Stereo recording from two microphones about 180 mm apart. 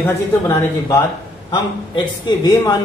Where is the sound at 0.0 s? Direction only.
15° left (ahead or behind).